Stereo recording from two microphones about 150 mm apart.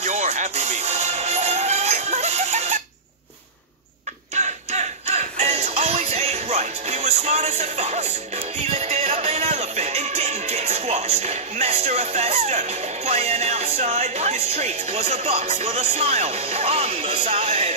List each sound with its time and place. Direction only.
0.0 s music: 50° right (ahead or behind)
4.4 s music: 50° right (ahead or behind)